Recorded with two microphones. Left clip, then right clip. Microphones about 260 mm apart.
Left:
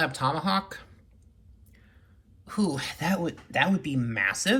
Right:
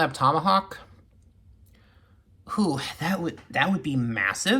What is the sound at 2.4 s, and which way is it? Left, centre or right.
Speech, centre.